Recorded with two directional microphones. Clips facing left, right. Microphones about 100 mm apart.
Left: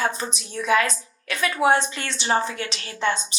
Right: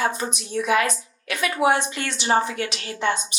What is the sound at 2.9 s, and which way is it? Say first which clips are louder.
Speech: even; 30° right (ahead or behind).